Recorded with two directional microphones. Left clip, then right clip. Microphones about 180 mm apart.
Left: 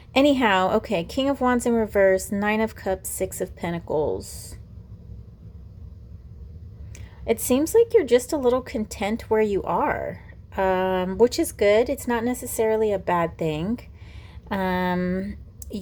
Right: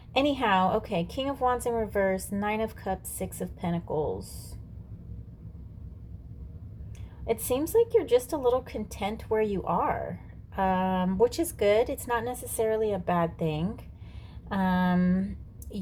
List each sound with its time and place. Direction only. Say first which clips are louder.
0.1 s a woman's voice: left 6 dB; 30° left (ahead or behind)
7.3 s a woman's voice: left 6 dB; 35° left (ahead or behind)